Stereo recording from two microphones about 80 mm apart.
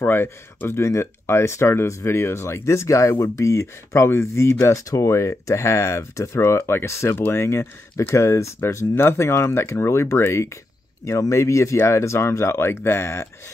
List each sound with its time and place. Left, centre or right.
0.0 s speech: left